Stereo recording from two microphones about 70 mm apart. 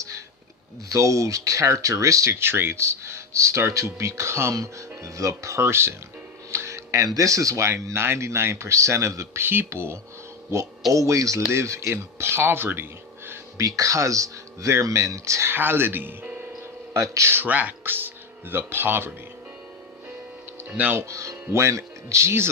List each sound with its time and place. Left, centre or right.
0.9 s speech: right
4.5 s speech: right
10.9 s speech: right
13.6 s speech: right
15.5 s speech: right
16.9 s speech: right
20.7 s speech: right
21.1 s speech: right